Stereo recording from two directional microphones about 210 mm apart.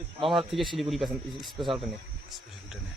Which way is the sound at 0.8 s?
Centre (ahead or behind).